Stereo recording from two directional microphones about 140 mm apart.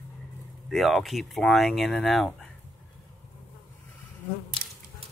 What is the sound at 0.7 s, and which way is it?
Speech, centre (ahead or behind).